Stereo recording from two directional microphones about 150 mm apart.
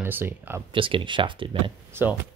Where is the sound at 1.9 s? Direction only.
15° right (ahead or behind).